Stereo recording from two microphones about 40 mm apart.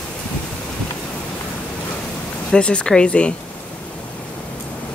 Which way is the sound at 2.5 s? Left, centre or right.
Left.